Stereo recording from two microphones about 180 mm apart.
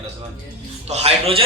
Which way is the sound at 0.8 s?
35° right (ahead or behind).